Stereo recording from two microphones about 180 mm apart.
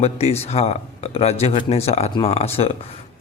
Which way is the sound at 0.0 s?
35° left (ahead or behind).